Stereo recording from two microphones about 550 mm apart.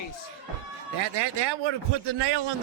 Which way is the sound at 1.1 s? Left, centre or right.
Right.